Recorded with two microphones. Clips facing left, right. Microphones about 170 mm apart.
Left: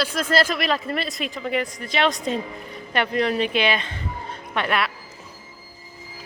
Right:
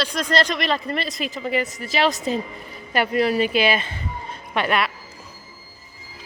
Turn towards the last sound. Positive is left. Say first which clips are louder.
# right 2 dB
turn(degrees=0)  # may be behind; listen again after turning